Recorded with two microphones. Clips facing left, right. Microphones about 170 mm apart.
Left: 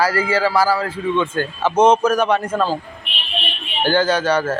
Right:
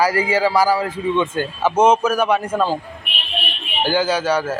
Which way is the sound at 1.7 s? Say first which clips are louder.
Left 2 dB; 5° right (ahead or behind).